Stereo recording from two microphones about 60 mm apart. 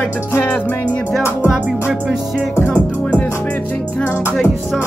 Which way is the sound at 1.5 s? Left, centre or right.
Centre.